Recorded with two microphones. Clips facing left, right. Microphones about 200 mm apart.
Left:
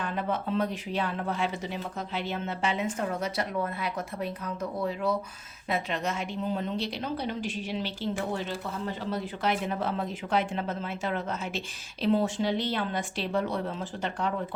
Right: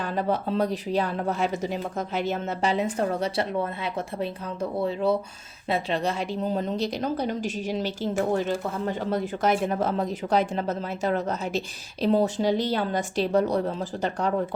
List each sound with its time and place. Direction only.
0.0 s a woman's voice: 35° right (ahead or behind)